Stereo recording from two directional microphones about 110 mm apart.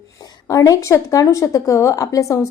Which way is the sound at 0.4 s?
30° left (ahead or behind).